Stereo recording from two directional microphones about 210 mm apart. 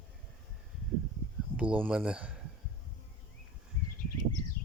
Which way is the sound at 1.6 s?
5° right (ahead or behind).